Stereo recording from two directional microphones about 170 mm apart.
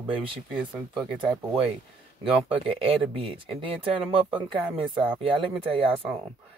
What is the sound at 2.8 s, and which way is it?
A man's voice, 30° right (ahead or behind).